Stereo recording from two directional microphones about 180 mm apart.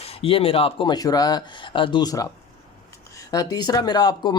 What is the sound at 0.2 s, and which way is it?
Speech, 30° left (ahead or behind).